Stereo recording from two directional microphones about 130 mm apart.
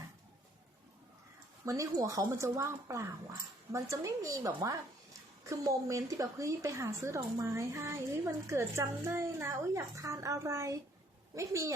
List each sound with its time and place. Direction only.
1.6 s a woman's voice: 25° right (ahead or behind)